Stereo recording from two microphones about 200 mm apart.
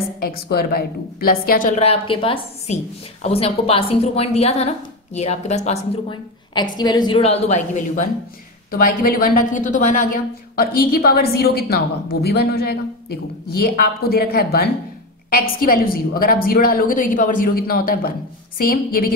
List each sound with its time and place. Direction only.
0.2 s a woman's voice: 50° left (ahead or behind)